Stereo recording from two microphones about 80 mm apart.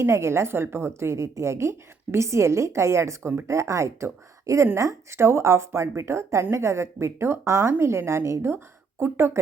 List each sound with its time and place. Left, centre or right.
0.0 s a woman's voice: right